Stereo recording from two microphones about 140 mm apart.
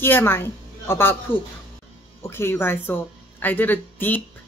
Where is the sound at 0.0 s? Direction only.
15° left (ahead or behind).